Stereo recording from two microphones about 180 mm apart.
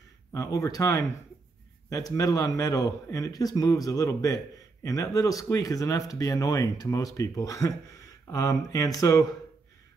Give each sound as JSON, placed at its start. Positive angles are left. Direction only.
{"t": 0.3, "sound": "speech", "side_deg": 20}